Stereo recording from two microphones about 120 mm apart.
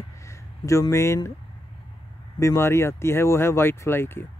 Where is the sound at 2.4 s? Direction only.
25° left (ahead or behind).